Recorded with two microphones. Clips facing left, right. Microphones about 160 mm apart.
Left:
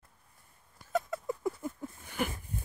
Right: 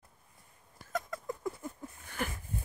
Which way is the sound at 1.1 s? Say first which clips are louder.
Left 4 dB; 10° left (ahead or behind).